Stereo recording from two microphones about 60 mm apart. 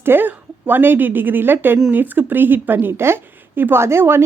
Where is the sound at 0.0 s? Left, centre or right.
Right.